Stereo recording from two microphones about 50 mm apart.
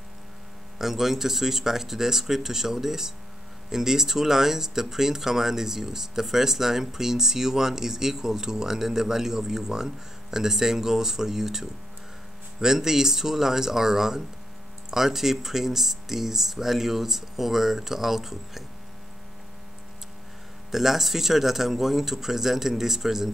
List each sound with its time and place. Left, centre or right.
0.7 s speech: centre
20.7 s speech: centre